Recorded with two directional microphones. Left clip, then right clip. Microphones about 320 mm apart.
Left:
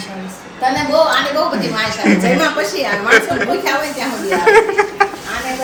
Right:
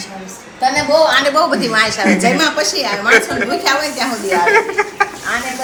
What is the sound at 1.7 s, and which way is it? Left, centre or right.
Speech, centre.